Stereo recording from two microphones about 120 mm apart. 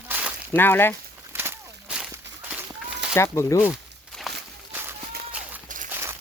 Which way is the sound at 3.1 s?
20° left (ahead or behind).